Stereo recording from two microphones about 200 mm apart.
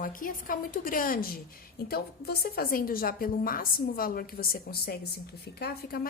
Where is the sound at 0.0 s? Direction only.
45° left (ahead or behind).